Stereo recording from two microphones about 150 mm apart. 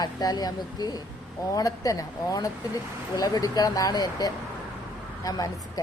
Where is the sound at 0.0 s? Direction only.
25° left (ahead or behind).